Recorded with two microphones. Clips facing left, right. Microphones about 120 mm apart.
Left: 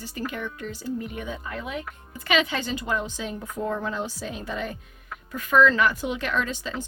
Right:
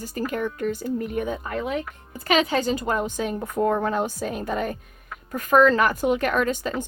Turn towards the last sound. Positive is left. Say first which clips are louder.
# right 5 dB
turn(degrees=-50)  # may be behind; listen again after turning